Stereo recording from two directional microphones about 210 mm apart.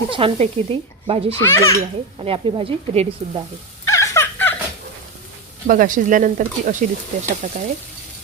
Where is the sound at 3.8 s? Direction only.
15° left (ahead or behind).